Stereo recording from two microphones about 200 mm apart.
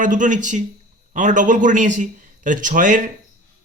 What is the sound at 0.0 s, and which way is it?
A man's voice, 40° right (ahead or behind).